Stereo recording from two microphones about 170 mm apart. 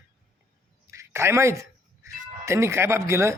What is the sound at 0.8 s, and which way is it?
Speech, 15° right (ahead or behind).